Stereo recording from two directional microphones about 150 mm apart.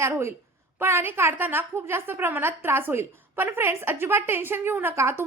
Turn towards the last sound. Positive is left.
turn(degrees=-15)  # may be behind; listen again after turning